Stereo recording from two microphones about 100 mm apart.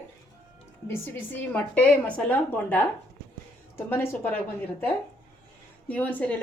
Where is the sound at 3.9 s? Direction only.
20° left (ahead or behind).